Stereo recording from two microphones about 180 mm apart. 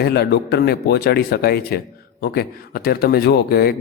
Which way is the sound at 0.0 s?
65° left (ahead or behind).